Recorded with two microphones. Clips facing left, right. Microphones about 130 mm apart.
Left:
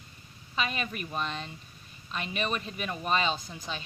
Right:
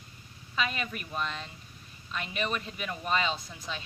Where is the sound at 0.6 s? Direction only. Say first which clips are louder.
Even; 25° left (ahead or behind).